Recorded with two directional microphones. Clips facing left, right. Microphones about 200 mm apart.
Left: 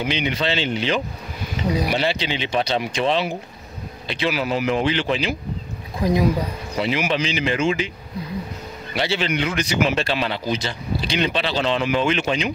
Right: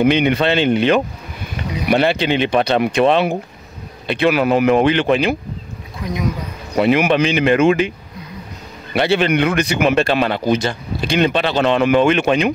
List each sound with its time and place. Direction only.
0.0 s a man's voice: 55° right (ahead or behind)
5.9 s speech: 30° left (ahead or behind)
6.8 s a man's voice: 55° right (ahead or behind)
8.9 s a man's voice: 55° right (ahead or behind)